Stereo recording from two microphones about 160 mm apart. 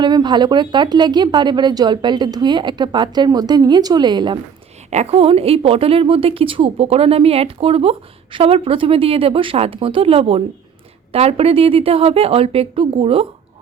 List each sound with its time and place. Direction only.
0.0 s a woman's voice: 25° right (ahead or behind)
4.9 s a woman's voice: 40° right (ahead or behind)